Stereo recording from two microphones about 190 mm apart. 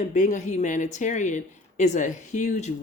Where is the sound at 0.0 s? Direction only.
40° left (ahead or behind).